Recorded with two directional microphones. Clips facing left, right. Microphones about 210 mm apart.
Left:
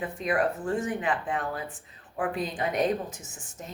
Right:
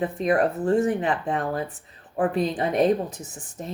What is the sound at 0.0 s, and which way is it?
Speech, 40° right (ahead or behind).